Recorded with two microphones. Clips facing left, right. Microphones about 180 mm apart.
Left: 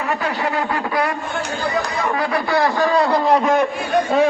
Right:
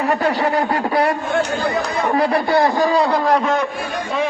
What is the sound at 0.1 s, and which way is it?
Speech, 40° right (ahead or behind).